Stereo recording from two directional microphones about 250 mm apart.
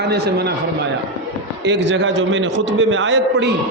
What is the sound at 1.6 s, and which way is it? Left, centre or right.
A man's voice, right.